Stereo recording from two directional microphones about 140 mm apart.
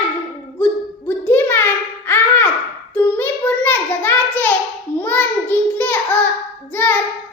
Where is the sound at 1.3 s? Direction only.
15° left (ahead or behind).